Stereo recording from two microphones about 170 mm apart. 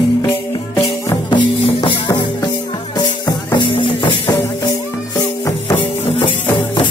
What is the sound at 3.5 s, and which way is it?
Music, 30° left (ahead or behind).